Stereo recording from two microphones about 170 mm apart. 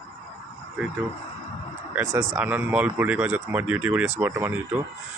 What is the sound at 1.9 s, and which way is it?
Speech, 15° right (ahead or behind).